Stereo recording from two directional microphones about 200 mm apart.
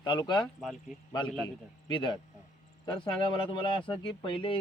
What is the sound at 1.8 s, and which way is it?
Speech, 25° left (ahead or behind).